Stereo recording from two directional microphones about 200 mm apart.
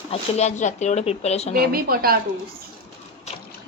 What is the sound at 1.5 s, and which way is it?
Speech, 50° right (ahead or behind).